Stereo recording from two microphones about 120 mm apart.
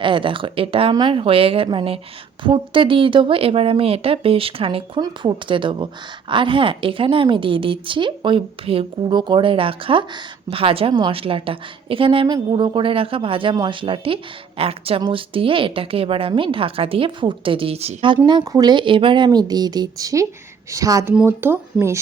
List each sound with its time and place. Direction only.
0.0 s a woman's voice: 45° right (ahead or behind)
18.3 s speech: 35° right (ahead or behind)
21.1 s speech: 15° right (ahead or behind)